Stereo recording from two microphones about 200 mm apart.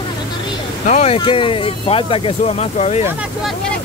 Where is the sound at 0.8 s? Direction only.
35° left (ahead or behind).